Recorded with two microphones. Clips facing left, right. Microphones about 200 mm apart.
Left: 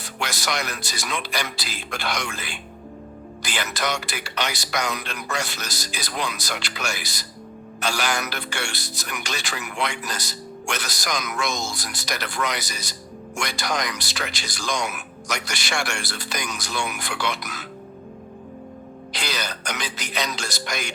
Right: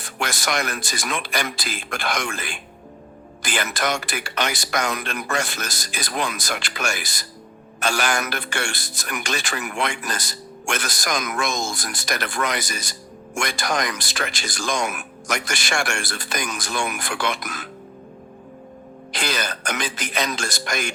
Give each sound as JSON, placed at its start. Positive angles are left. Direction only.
{"t": 0.0, "sound": "speech", "side_deg": -50}
{"t": 19.1, "sound": "speech", "side_deg": -50}